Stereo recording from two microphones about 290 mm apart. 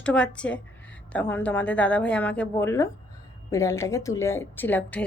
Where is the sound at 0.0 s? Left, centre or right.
Centre.